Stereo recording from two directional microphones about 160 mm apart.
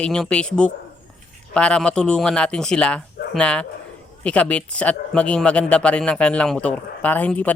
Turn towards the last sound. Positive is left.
turn(degrees=10)  # may be behind; listen again after turning